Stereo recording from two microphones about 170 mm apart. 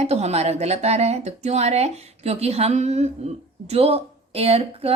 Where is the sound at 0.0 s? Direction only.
40° right (ahead or behind).